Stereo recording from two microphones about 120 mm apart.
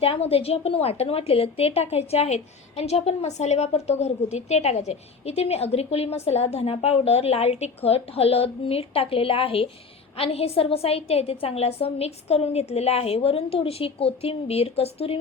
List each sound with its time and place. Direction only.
0.0 s a woman's voice: 55° left (ahead or behind)